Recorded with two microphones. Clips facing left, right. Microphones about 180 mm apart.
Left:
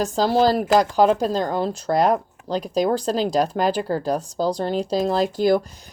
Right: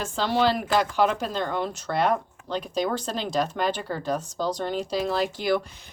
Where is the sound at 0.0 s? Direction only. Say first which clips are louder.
Left 5 dB; 40° left (ahead or behind).